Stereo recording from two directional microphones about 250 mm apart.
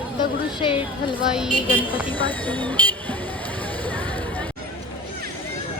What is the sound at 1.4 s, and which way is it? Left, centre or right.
A woman's voice, centre.